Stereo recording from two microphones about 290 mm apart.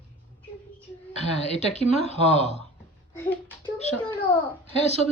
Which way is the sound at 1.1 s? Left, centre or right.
Left.